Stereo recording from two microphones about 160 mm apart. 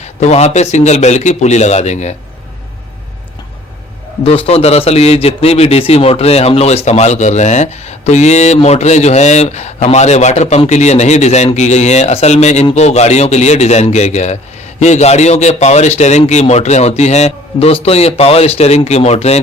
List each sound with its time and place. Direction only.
0.0 s speech: 45° left (ahead or behind)
4.2 s a man's voice: 35° left (ahead or behind)